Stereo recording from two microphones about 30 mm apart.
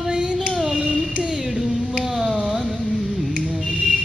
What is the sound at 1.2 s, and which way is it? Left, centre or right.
Music, right.